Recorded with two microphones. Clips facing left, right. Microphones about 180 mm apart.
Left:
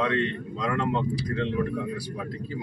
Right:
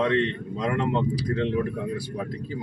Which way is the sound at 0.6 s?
20° right (ahead or behind).